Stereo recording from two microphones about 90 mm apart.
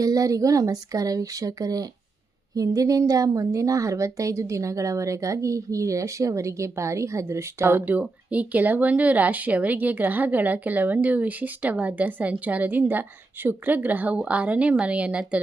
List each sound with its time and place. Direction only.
0.0 s a woman's voice: 40° right (ahead or behind); by 15.4 s 15° right (ahead or behind)